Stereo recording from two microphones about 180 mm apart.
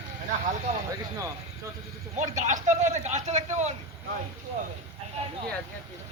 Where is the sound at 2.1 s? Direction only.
40° right (ahead or behind).